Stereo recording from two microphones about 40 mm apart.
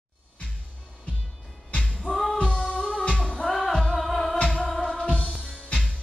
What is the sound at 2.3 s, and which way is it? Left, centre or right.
Music, left.